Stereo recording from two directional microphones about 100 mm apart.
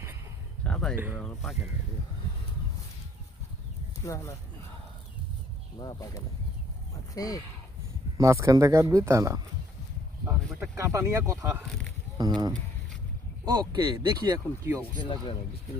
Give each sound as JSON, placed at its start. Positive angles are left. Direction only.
{"t": 0.6, "sound": "a sound", "side_deg": 10}
{"t": 0.9, "sound": "speech", "side_deg": -20}
{"t": 1.2, "sound": "speech", "side_deg": 0}
{"t": 4.0, "sound": "speech", "side_deg": 30}
{"t": 5.8, "sound": "speech", "side_deg": 40}
{"t": 8.2, "sound": "speech", "side_deg": -30}
{"t": 10.6, "sound": "speech", "side_deg": -30}
{"t": 12.1, "sound": "speech", "side_deg": -45}
{"t": 14.3, "sound": "speech", "side_deg": -30}
{"t": 14.9, "sound": "speech", "side_deg": 50}